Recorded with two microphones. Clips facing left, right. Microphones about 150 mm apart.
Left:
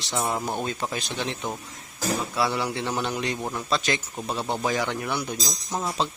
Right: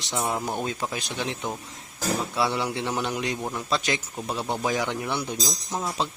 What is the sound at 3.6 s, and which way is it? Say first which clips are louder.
A man's voice: left 1 dB; 10° right (ahead or behind).